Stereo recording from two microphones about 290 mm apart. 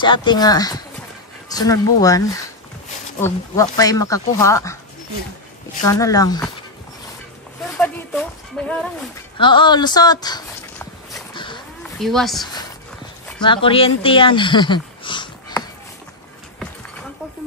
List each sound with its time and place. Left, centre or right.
0.0 s speech: centre
5.9 s speech: centre
7.8 s a sound: centre
9.4 s speech: centre
11.3 s a sound: centre
12.0 s speech: centre
13.4 s speech: centre